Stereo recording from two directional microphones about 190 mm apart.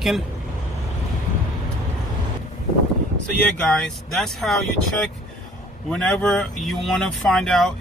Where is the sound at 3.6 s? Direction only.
5° left (ahead or behind).